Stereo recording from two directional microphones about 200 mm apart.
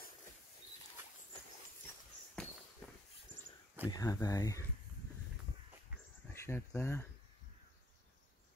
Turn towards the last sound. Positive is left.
turn(degrees=15)  # may be behind; listen again after turning